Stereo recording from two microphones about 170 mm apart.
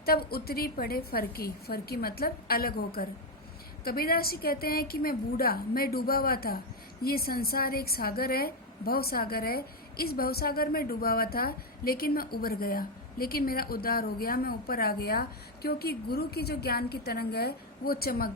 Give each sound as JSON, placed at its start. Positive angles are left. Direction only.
{"t": 0.0, "sound": "a woman's voice", "side_deg": 65}